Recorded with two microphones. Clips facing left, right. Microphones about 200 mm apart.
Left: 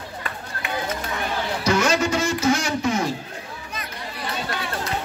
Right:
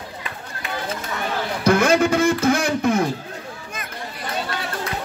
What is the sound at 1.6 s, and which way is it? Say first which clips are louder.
Music: right 5 dB; 55° right (ahead or behind).